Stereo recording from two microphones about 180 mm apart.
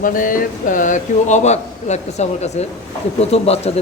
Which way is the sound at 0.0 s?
50° left (ahead or behind).